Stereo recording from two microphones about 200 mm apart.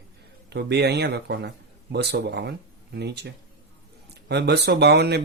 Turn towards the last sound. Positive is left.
turn(degrees=-55)  # may be behind; listen again after turning